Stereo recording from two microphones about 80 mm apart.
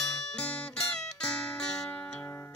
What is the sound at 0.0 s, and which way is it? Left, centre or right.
Music, centre.